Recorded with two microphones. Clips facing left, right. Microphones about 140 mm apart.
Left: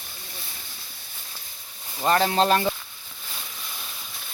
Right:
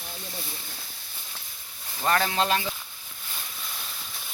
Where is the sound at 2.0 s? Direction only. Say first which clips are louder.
Left 4 dB; 30° left (ahead or behind); by 2.7 s 45° left (ahead or behind).